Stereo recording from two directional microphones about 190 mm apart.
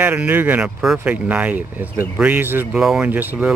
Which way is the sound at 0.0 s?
10° right (ahead or behind).